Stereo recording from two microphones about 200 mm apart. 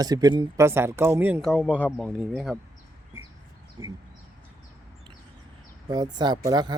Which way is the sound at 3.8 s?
15° right (ahead or behind).